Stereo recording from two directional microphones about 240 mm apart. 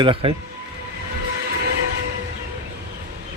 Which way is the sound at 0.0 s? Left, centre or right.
Right.